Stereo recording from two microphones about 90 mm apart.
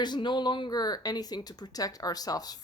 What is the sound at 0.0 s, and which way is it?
Speech, 55° left (ahead or behind).